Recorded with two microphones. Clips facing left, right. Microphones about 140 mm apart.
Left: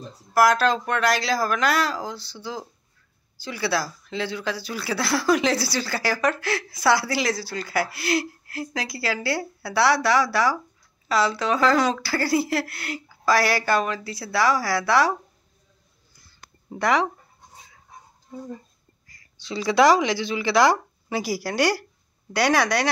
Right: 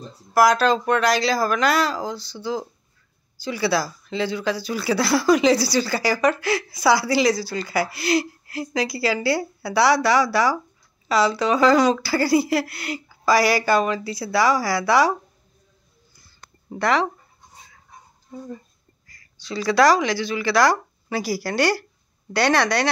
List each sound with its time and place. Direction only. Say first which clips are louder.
0.3 s speech: right 2 dB; centre (ahead or behind)
16.7 s speech: right 1 dB; 15° left (ahead or behind)
19.4 s speech: right 1 dB; 20° left (ahead or behind)